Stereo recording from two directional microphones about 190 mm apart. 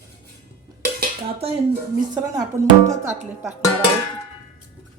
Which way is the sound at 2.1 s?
20° right (ahead or behind).